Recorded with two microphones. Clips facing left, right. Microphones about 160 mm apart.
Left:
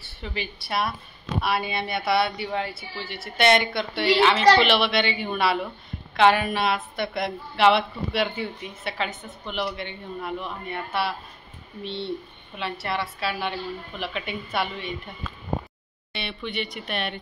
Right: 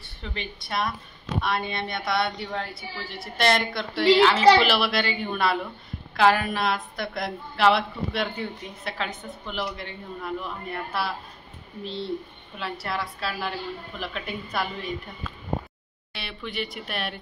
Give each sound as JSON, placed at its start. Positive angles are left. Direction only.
{"t": 0.0, "sound": "a woman's voice", "side_deg": 5}
{"t": 16.1, "sound": "a woman's voice", "side_deg": 0}